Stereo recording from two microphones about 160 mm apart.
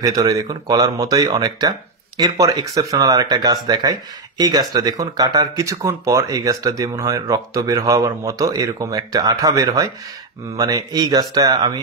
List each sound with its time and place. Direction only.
0.0 s speech: 25° right (ahead or behind)